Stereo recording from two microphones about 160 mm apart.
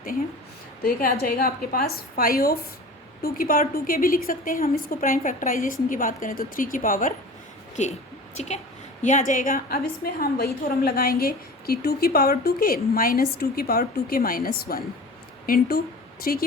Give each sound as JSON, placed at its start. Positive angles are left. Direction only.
{"t": 0.8, "sound": "a woman's voice", "side_deg": 70}